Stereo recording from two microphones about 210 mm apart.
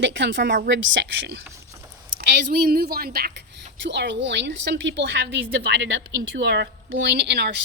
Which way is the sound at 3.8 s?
55° right (ahead or behind).